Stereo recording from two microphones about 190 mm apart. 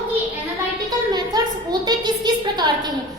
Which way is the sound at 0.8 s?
20° right (ahead or behind).